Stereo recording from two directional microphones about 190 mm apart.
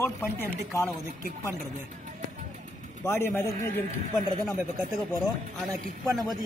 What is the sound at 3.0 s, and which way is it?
Speech, 15° left (ahead or behind).